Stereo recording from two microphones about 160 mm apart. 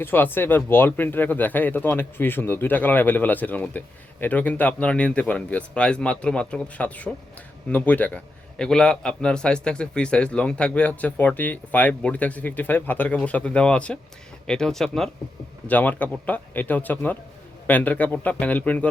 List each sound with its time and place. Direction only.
0.0 s speech: 15° left (ahead or behind)